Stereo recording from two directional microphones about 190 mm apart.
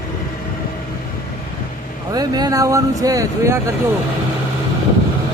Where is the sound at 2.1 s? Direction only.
20° right (ahead or behind).